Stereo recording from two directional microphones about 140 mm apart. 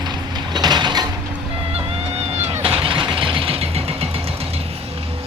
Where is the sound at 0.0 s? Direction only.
30° right (ahead or behind).